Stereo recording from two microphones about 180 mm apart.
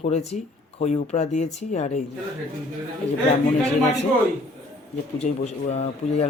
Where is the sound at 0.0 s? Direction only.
40° left (ahead or behind).